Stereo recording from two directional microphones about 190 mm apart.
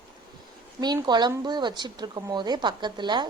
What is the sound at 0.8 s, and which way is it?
Speech, 20° right (ahead or behind).